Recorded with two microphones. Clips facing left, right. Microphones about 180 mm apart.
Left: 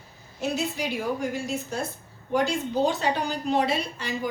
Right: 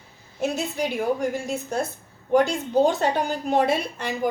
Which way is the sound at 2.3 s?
50° right (ahead or behind).